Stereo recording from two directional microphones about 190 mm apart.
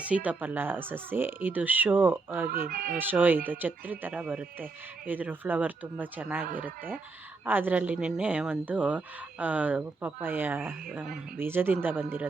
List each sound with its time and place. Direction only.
0.0 s speech: 5° right (ahead or behind)
2.5 s speech: 50° right (ahead or behind)
2.9 s speech: 10° right (ahead or behind)
7.4 s speech: 10° right (ahead or behind)